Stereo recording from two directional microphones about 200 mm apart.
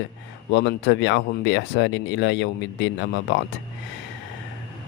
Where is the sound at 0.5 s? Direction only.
65° left (ahead or behind).